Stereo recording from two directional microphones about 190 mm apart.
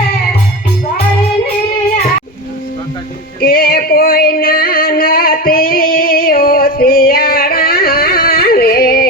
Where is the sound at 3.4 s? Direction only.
55° left (ahead or behind).